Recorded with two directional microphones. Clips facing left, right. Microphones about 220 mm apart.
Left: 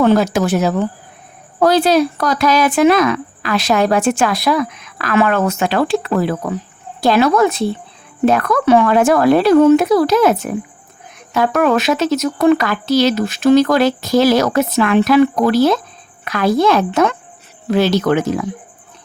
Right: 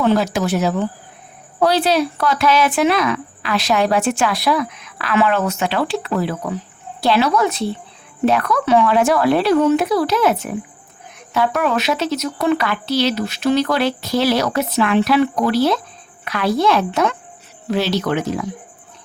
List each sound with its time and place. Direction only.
0.0 s speech: 50° left (ahead or behind)